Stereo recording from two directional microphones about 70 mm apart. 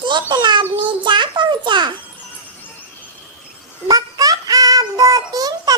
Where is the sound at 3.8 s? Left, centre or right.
Right.